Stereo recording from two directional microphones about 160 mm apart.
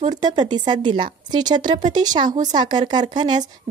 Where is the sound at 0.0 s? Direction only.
25° right (ahead or behind).